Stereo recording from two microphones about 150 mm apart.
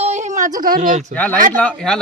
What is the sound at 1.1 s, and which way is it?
Speech, 10° left (ahead or behind).